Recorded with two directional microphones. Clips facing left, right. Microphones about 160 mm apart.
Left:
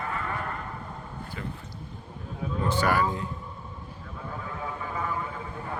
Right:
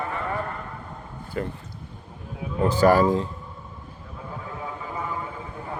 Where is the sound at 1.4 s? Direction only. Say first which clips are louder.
Right 9 dB; 50° right (ahead or behind).